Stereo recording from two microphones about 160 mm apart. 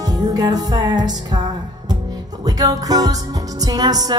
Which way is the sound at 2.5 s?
25° right (ahead or behind).